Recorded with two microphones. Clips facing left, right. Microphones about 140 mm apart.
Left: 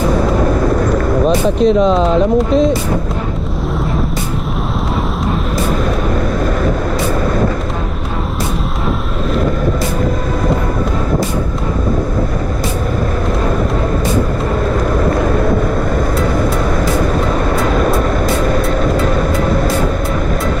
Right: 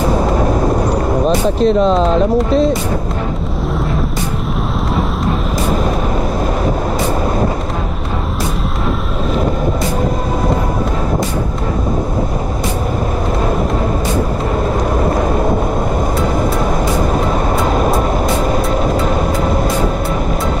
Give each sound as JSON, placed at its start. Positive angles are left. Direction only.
{"t": 1.2, "sound": "speech", "side_deg": 0}
{"t": 17.7, "sound": "vehicle", "side_deg": -30}